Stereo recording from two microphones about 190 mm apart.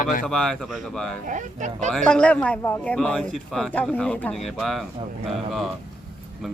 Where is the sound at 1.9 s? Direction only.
5° left (ahead or behind).